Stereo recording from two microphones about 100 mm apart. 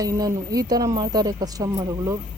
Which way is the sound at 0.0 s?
35° right (ahead or behind).